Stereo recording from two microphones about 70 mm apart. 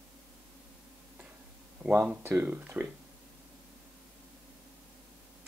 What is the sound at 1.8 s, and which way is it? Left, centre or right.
Speech, right.